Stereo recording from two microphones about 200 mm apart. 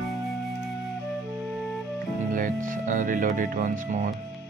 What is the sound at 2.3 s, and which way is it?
Music, 40° right (ahead or behind).